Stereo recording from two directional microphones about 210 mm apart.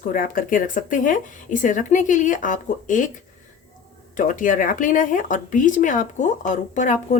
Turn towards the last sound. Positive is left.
turn(degrees=35)  # may be behind; listen again after turning